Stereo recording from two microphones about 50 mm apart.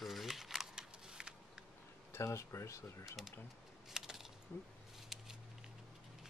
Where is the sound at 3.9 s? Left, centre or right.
Centre.